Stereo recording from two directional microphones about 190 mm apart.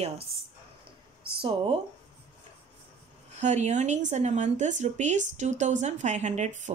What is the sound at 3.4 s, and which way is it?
Speech, 35° right (ahead or behind).